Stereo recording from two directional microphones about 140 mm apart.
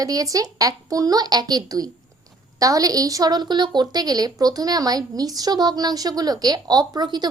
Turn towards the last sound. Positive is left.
turn(degrees=-30)  # may be behind; listen again after turning